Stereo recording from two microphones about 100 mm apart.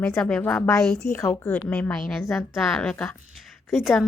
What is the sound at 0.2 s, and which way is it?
Speech, 5° left (ahead or behind).